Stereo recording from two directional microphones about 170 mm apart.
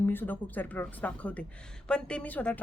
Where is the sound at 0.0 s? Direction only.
10° left (ahead or behind).